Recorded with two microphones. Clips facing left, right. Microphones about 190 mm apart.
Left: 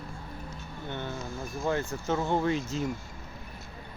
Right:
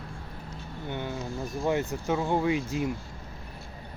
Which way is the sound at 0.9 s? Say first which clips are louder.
Right 3 dB; 15° right (ahead or behind).